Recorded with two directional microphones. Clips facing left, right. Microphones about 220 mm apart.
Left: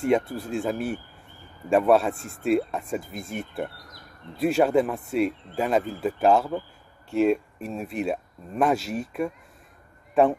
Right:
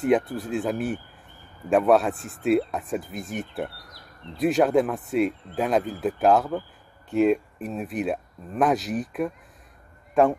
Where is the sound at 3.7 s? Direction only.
45° left (ahead or behind).